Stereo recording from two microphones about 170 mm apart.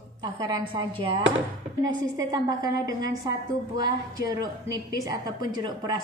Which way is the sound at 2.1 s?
20° right (ahead or behind).